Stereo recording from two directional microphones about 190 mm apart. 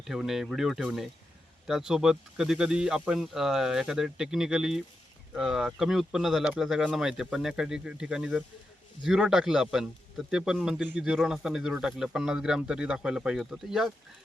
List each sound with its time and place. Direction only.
0.0 s speech: centre (ahead or behind)